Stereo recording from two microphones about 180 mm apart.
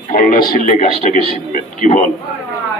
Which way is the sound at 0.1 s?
50° left (ahead or behind).